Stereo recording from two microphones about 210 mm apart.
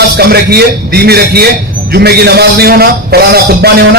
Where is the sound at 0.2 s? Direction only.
50° right (ahead or behind).